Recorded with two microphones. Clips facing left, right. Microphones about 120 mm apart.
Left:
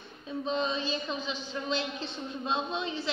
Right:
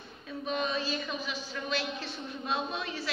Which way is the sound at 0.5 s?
25° left (ahead or behind).